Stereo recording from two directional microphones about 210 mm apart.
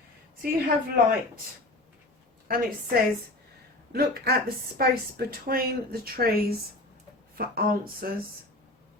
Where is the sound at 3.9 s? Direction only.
45° right (ahead or behind).